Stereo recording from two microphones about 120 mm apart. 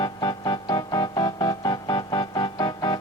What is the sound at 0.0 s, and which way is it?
Music, 35° left (ahead or behind).